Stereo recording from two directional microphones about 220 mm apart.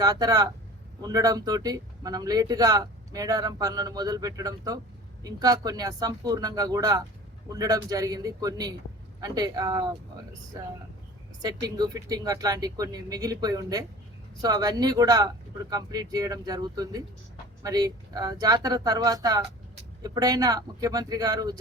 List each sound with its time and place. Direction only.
0.0 s a man's voice: 15° right (ahead or behind)